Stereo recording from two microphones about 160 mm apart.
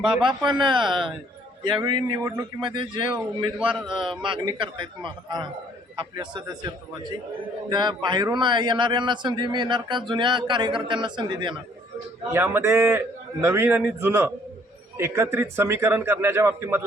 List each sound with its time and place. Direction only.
0.2 s a man's voice: 30° right (ahead or behind)
2.2 s speech: 20° right (ahead or behind)
2.6 s a man's voice: 30° right (ahead or behind)
3.8 s speech: centre (ahead or behind)
4.2 s a man's voice: 30° right (ahead or behind)
7.7 s a man's voice: 30° right (ahead or behind)
12.3 s speech: 15° right (ahead or behind)